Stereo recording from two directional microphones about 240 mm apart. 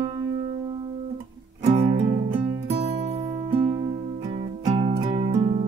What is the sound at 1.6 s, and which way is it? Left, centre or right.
Music, right.